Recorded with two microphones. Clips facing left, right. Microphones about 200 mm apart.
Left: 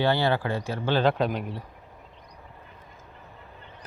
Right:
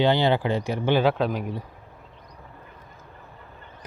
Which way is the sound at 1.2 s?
5° right (ahead or behind).